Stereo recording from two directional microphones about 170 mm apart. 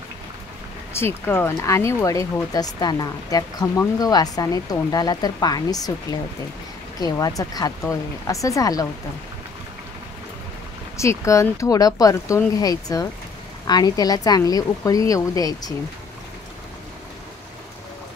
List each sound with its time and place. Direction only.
0.9 s speech: 10° left (ahead or behind)
7.0 s speech: 20° left (ahead or behind)
11.0 s speech: 15° left (ahead or behind)